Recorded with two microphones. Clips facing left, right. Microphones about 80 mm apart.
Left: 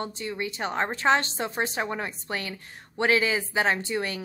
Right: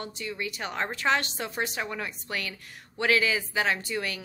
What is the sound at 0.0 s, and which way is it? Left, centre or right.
A woman's voice, left.